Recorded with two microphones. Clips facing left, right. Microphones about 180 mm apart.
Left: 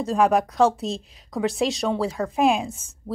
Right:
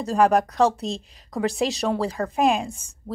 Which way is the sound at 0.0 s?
Centre (ahead or behind).